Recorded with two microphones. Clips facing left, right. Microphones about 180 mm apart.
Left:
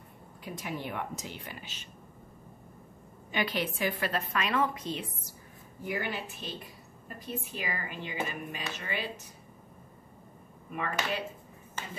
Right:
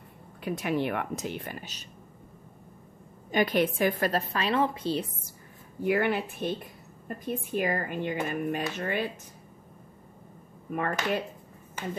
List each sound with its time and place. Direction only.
0.4 s speech: 70° right (ahead or behind); by 1.9 s 40° right (ahead or behind)
3.3 s a woman's voice: 50° right (ahead or behind); by 5.0 s 30° right (ahead or behind)
5.9 s speech: 60° right (ahead or behind)
10.7 s speech: 50° right (ahead or behind)